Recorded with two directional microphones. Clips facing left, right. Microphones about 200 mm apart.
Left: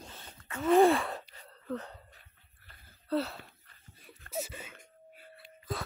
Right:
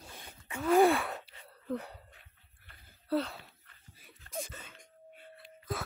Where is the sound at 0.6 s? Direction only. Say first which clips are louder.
Left 2 dB; centre (ahead or behind).